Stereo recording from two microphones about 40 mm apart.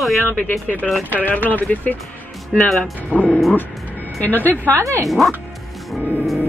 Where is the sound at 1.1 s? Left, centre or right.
Left.